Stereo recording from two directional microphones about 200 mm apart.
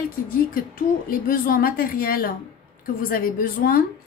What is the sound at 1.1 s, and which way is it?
A woman's voice, 45° left (ahead or behind).